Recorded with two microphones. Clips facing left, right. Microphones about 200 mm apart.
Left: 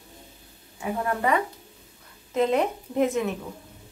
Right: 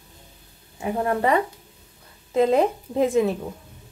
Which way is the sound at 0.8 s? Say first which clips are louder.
Right 4 dB; 30° right (ahead or behind).